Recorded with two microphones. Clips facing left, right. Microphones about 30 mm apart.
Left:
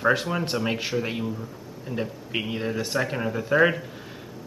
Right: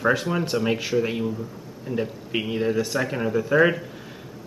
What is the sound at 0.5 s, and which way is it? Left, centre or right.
A man's voice, centre.